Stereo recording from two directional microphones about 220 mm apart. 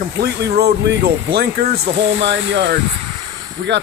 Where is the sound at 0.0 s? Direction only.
45° right (ahead or behind).